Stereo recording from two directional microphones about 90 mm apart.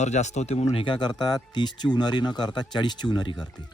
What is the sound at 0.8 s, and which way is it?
Speech, 60° left (ahead or behind).